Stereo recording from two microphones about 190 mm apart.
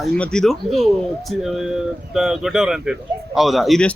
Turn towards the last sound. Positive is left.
turn(degrees=0)  # may be behind; listen again after turning